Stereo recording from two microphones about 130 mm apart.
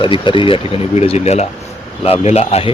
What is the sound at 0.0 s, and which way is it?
Speech, 40° left (ahead or behind).